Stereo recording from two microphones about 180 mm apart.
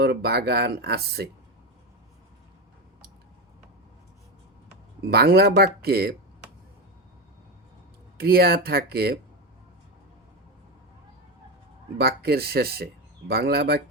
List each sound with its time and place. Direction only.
0.0 s speech: 65° right (ahead or behind)
5.0 s speech: 60° right (ahead or behind)
8.2 s speech: 55° right (ahead or behind)
11.9 s speech: 60° right (ahead or behind)